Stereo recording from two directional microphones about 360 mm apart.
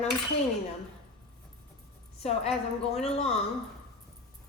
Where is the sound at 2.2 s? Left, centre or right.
Centre.